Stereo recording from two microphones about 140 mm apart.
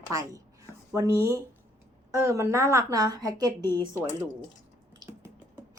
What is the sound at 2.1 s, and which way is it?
Speech, 20° right (ahead or behind).